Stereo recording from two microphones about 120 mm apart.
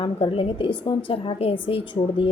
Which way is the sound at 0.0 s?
45° left (ahead or behind).